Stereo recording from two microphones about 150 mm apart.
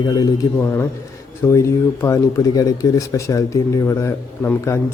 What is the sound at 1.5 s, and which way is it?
A man's voice, 20° left (ahead or behind).